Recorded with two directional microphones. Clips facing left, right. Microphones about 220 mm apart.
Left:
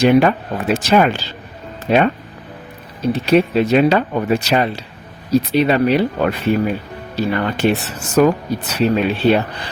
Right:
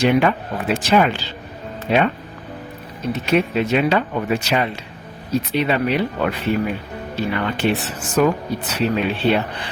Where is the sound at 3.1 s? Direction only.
35° left (ahead or behind).